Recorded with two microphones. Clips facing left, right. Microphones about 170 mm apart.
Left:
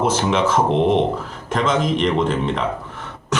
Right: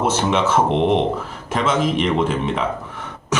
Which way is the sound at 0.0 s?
5° right (ahead or behind).